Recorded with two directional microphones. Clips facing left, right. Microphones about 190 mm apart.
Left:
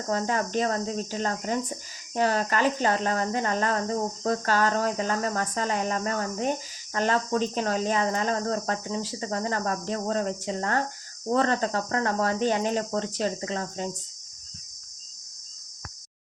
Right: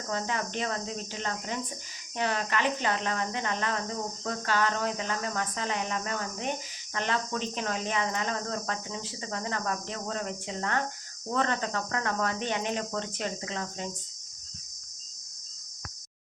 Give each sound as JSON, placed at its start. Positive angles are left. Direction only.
{"t": 0.1, "sound": "speech", "side_deg": 40}